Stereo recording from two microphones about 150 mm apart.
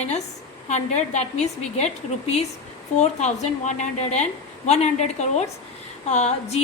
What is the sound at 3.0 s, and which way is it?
A woman's voice, 50° left (ahead or behind).